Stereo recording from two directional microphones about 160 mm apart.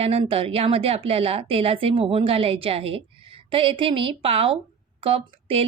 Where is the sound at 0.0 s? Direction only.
40° right (ahead or behind).